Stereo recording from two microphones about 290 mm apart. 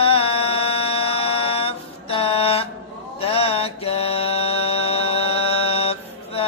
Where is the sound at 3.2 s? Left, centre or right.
Centre.